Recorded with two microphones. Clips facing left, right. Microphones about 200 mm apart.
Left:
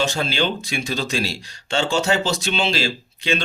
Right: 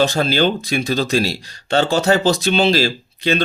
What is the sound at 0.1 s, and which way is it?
Speech, 40° right (ahead or behind).